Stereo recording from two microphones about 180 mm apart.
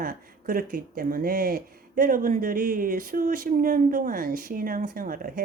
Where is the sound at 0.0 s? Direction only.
50° right (ahead or behind).